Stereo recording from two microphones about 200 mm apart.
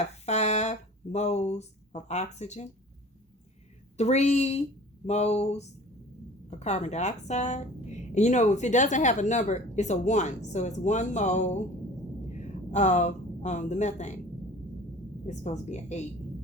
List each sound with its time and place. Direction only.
0.0 s speech: 35° left (ahead or behind)
3.9 s a woman's voice: 35° left (ahead or behind)
15.3 s a woman's voice: 35° left (ahead or behind)